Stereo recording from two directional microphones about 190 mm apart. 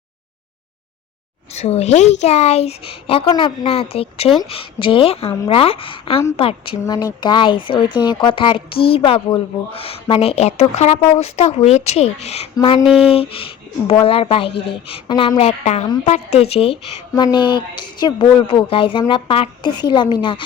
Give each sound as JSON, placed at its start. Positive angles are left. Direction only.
{"t": 1.5, "sound": "a woman's voice", "side_deg": 35}
{"t": 12.8, "sound": "a sound", "side_deg": -5}
{"t": 13.1, "sound": "a woman's voice", "side_deg": 30}